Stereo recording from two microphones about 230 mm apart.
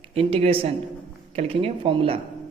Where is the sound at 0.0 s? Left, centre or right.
Right.